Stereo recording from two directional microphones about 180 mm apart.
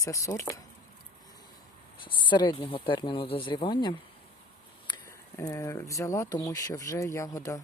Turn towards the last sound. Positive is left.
turn(degrees=20)  # may be behind; listen again after turning